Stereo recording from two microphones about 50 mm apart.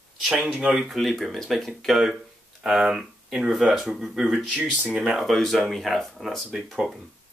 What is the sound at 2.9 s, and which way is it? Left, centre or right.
Speech, centre.